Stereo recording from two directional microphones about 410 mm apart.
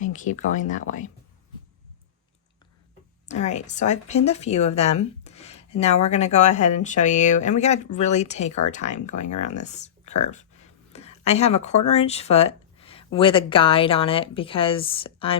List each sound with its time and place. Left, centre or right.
0.0 s speech: centre
3.2 s speech: centre